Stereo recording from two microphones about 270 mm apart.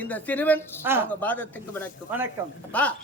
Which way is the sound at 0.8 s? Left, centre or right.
Centre.